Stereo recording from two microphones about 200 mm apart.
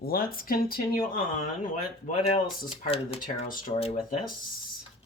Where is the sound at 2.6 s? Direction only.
25° left (ahead or behind).